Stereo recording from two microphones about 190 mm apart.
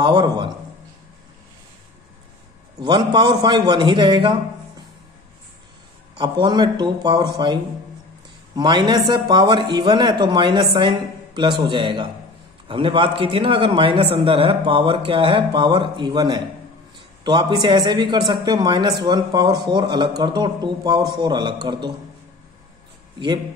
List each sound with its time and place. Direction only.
0.0 s speech: 25° right (ahead or behind)
2.8 s speech: 25° right (ahead or behind)
6.1 s speech: 25° right (ahead or behind)
8.5 s speech: 25° right (ahead or behind)